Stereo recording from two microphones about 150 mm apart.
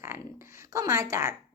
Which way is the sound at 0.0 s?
20° right (ahead or behind).